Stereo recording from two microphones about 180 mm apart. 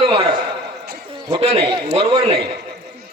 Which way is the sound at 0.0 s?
30° right (ahead or behind).